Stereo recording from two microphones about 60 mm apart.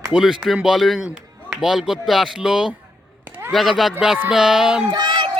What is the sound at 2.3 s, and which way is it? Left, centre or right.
Speech, centre.